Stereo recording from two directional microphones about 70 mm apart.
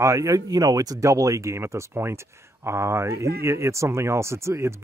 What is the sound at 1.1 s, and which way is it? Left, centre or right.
Speech, right.